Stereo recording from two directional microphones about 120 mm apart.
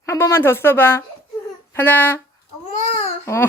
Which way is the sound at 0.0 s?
25° left (ahead or behind).